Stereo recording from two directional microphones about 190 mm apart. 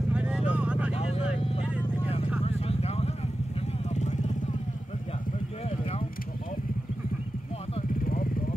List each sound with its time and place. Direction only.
0.1 s vehicle: 5° right (ahead or behind)
0.9 s vehicle: 30° left (ahead or behind)
8.0 s vehicle: 45° left (ahead or behind)